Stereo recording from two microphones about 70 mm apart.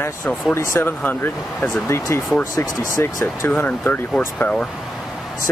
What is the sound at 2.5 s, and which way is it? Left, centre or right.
Speech, left.